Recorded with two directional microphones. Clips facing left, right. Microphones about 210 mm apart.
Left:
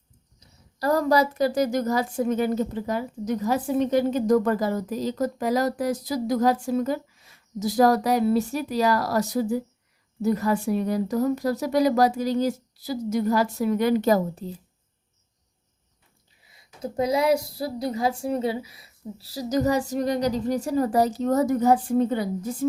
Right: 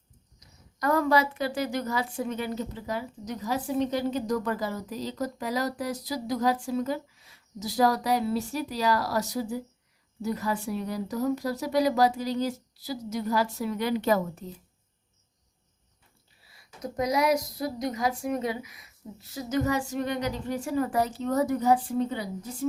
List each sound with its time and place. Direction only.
0.3 s a woman's voice: 35° left (ahead or behind)
16.4 s speech: 20° left (ahead or behind); by 22.3 s 50° left (ahead or behind)